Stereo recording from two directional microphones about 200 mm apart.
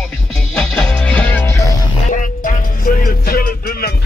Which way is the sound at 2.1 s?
40° left (ahead or behind).